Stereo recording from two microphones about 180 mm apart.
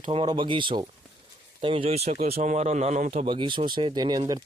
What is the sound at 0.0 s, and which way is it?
Speech, 35° right (ahead or behind).